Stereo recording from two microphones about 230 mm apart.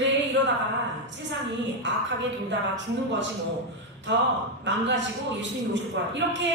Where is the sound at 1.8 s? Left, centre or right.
Right.